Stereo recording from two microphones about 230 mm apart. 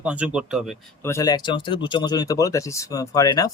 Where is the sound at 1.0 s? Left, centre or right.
Centre.